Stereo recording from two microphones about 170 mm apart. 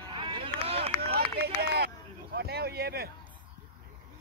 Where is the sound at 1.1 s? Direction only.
70° right (ahead or behind).